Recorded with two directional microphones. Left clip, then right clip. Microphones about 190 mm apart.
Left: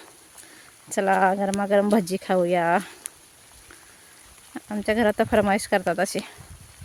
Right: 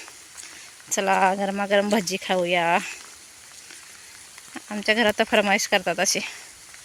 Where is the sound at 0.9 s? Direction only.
30° left (ahead or behind).